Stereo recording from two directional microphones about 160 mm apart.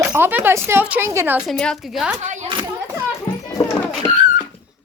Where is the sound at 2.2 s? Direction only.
50° right (ahead or behind).